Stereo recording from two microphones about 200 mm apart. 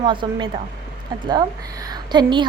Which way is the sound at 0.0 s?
25° right (ahead or behind).